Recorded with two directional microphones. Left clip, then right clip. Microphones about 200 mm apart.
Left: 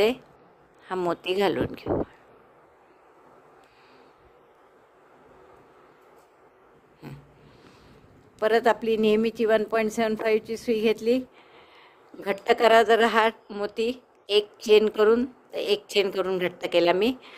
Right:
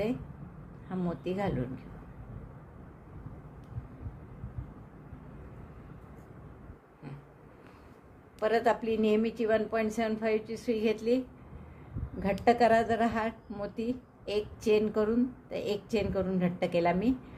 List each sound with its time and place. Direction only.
0.9 s a woman's voice: 45° left (ahead or behind)
8.4 s a woman's voice: 45° left (ahead or behind)
12.5 s a woman's voice: 40° left (ahead or behind)